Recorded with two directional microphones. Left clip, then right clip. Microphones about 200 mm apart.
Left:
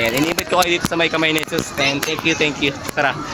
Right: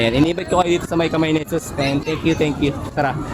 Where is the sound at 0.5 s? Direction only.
Centre (ahead or behind).